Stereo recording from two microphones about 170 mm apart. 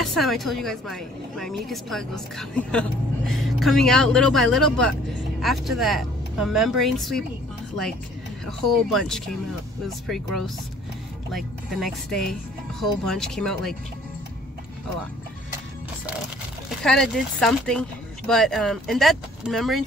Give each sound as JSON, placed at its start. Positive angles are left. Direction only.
{"t": 0.0, "sound": "a woman's voice", "side_deg": 0}
{"t": 8.5, "sound": "a woman's voice", "side_deg": 0}
{"t": 16.8, "sound": "a woman's voice", "side_deg": 5}